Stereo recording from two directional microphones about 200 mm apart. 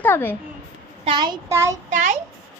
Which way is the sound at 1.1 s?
20° right (ahead or behind).